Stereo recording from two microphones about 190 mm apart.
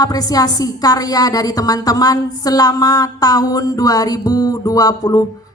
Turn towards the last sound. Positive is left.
turn(degrees=20)  # may be behind; listen again after turning